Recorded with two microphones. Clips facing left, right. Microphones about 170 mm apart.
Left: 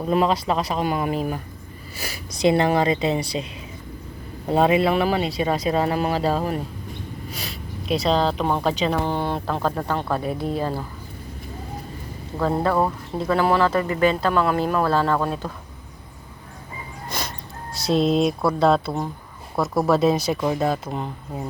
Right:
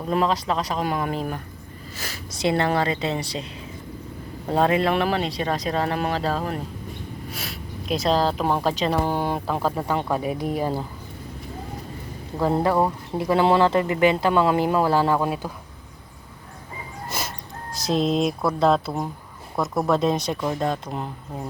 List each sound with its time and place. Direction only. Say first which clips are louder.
0.1 s speech: left 2 dB; 5° left (ahead or behind)
4.4 s speech: left 2 dB; 10° left (ahead or behind)
7.3 s speech: even; centre (ahead or behind)
12.4 s speech: even; 15° right (ahead or behind)
17.1 s music: left 1 dB; 5° right (ahead or behind)
17.7 s speech: left 2 dB; centre (ahead or behind)